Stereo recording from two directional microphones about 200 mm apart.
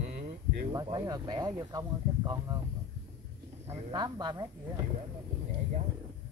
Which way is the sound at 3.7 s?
25° right (ahead or behind).